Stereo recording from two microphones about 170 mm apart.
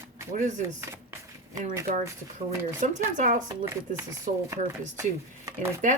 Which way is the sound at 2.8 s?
45° right (ahead or behind).